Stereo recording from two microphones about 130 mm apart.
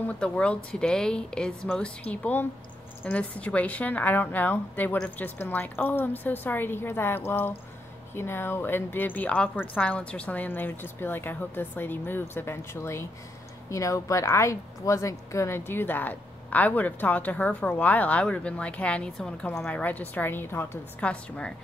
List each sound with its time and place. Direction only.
0.0 s a woman's voice: 10° left (ahead or behind)